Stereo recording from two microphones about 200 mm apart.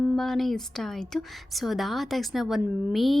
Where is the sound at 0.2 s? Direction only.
Centre (ahead or behind).